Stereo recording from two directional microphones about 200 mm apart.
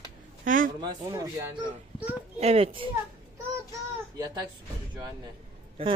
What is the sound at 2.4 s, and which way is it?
Speech, 30° right (ahead or behind).